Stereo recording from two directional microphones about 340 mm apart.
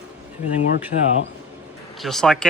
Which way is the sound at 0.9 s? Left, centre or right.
Left.